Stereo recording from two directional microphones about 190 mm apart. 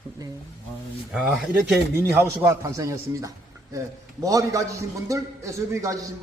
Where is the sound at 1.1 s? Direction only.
Centre (ahead or behind).